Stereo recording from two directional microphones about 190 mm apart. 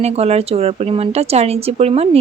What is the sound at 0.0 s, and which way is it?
Speech, 35° right (ahead or behind).